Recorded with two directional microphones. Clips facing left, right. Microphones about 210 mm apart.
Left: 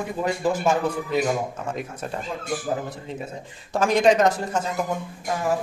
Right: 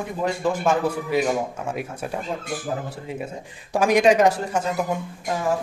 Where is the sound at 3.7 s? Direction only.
15° right (ahead or behind).